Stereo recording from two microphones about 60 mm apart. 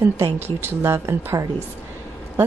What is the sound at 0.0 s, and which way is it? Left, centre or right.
A woman's voice, right.